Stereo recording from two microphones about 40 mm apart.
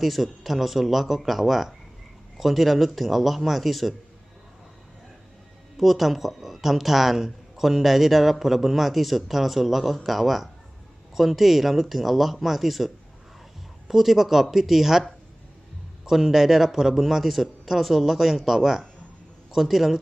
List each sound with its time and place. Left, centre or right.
0.0 s speech: centre
5.7 s speech: centre
16.0 s speech: centre